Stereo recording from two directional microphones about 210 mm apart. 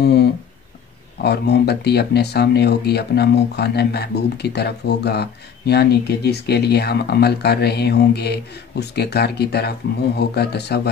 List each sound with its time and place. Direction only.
0.0 s speech: 50° left (ahead or behind)